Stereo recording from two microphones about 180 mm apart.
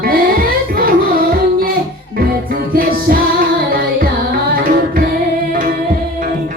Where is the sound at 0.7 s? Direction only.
55° right (ahead or behind).